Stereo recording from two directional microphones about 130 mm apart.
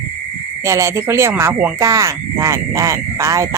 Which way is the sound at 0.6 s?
20° right (ahead or behind).